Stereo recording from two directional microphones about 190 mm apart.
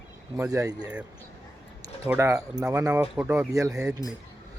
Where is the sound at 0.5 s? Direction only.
20° right (ahead or behind).